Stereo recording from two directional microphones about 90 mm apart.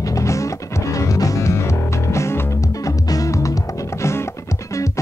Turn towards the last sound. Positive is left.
turn(degrees=35)  # may be behind; listen again after turning